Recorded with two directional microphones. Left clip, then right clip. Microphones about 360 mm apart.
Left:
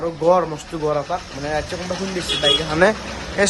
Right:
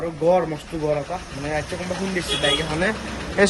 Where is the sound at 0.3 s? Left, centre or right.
Centre.